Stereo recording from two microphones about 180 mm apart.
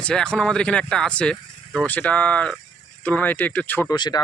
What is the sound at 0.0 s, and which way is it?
Speech, 5° left (ahead or behind).